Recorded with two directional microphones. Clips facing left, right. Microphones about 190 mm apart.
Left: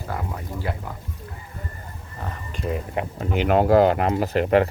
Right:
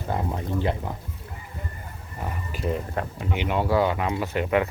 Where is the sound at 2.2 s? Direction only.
10° right (ahead or behind).